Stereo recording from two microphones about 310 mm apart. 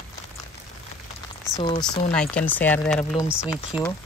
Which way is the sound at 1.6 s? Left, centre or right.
Centre.